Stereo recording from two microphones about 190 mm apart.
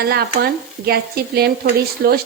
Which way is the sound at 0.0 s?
55° right (ahead or behind).